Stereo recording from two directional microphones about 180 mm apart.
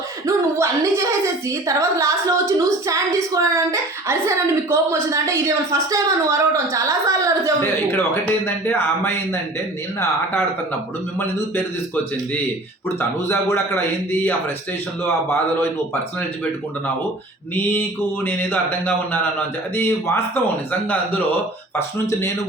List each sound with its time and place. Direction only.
0.3 s speech: 15° right (ahead or behind)
7.9 s speech: 10° left (ahead or behind)
13.0 s speech: 15° left (ahead or behind)
17.5 s speech: 10° left (ahead or behind)
21.8 s speech: 15° left (ahead or behind)